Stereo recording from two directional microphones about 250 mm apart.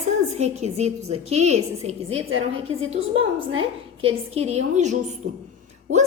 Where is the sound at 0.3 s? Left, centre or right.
Right.